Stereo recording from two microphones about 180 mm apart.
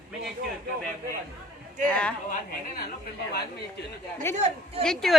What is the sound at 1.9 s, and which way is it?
Speech, 5° left (ahead or behind).